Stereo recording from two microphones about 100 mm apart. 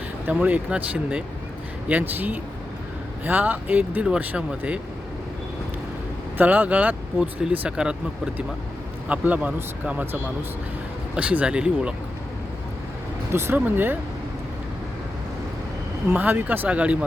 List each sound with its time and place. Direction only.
0.3 s speech: 15° right (ahead or behind)
6.3 s speech: 15° right (ahead or behind)
9.0 s speech: 15° right (ahead or behind)
13.3 s speech: 25° right (ahead or behind)
16.0 s speech: 20° right (ahead or behind)